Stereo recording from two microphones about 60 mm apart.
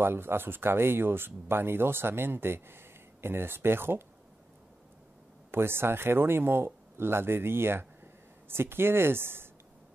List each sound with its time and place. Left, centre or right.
0.0 s speech: right
5.5 s speech: right